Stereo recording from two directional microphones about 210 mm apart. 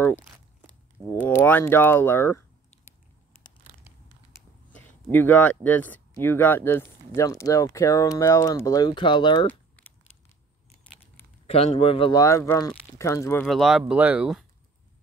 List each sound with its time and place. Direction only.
1.2 s speech: 10° left (ahead or behind)
4.3 s speech: 10° left (ahead or behind)
11.4 s speech: 30° left (ahead or behind); by 13.5 s 10° left (ahead or behind)
13.5 s speech: centre (ahead or behind)